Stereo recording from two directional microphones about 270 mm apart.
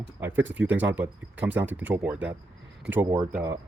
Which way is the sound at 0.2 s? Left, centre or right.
Centre.